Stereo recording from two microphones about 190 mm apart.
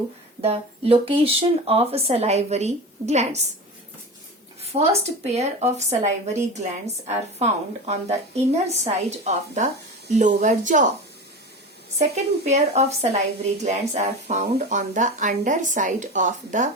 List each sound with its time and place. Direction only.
0.4 s speech: 30° right (ahead or behind)
4.6 s speech: 35° right (ahead or behind)
11.9 s speech: 35° right (ahead or behind)